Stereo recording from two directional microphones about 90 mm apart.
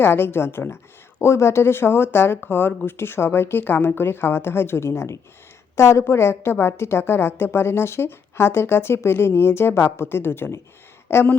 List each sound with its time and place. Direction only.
0.0 s a woman's voice: 25° left (ahead or behind)